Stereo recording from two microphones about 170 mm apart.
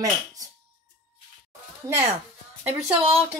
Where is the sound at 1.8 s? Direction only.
20° right (ahead or behind).